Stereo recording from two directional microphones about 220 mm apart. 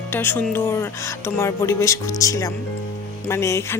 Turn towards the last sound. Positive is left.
turn(degrees=10)  # may be behind; listen again after turning